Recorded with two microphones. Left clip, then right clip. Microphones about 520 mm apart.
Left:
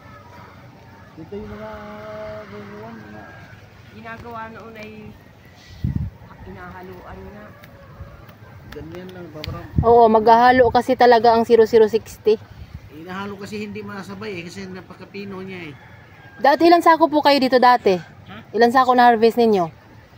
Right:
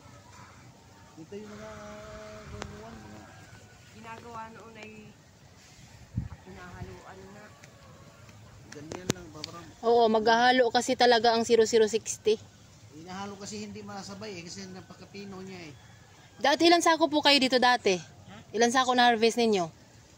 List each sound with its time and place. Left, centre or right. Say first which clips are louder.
1.5 s vehicle: left 10 dB; centre
4.0 s a man's voice: left 9 dB; right
9.4 s speech: left 7 dB; centre
9.8 s speech: left 11 dB; right
13.0 s a man's voice: left 9 dB; right
16.3 s speech: left 9 dB; right